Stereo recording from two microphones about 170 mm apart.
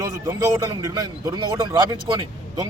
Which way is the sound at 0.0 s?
20° right (ahead or behind).